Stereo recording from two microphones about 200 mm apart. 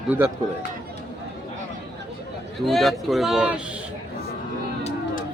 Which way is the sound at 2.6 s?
Centre (ahead or behind).